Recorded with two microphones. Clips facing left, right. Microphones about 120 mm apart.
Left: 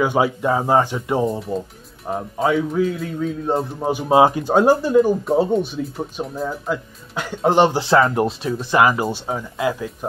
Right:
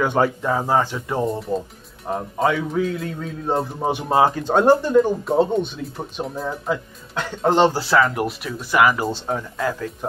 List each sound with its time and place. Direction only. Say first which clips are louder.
0.0 s speech: left 1 dB; 10° left (ahead or behind)
2.0 s speech: left 1 dB; centre (ahead or behind); by 9.1 s 25° left (ahead or behind)
9.1 s speech: even; 10° left (ahead or behind)